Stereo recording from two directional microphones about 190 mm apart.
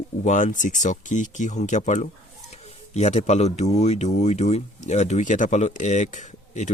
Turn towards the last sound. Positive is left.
turn(degrees=40)  # may be behind; listen again after turning